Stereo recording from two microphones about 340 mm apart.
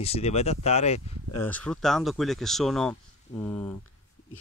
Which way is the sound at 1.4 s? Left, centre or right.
Centre.